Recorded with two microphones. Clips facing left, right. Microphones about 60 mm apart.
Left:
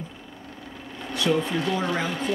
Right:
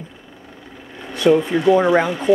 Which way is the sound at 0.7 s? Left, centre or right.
Centre.